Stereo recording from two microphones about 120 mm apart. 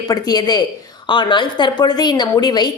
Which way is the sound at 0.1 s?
35° left (ahead or behind).